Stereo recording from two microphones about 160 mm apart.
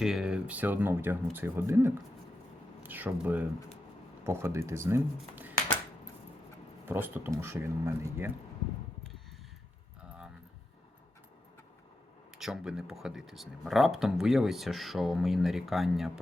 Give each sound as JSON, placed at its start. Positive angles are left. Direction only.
{"t": 0.0, "sound": "speech", "side_deg": -5}
{"t": 6.8, "sound": "speech", "side_deg": -15}
{"t": 12.4, "sound": "speech", "side_deg": -5}